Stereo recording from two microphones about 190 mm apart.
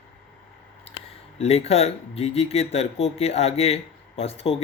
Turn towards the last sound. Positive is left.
turn(degrees=30)  # may be behind; listen again after turning